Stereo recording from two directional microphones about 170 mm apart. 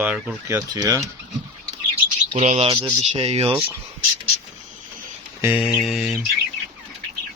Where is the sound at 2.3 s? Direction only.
40° right (ahead or behind).